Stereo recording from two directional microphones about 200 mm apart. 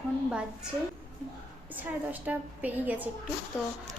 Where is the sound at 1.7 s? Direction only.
10° right (ahead or behind).